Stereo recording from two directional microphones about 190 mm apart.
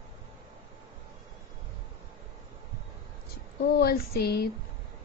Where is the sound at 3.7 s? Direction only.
55° left (ahead or behind).